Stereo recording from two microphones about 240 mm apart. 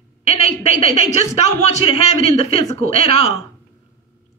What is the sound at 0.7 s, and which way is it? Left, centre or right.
A woman's voice, left.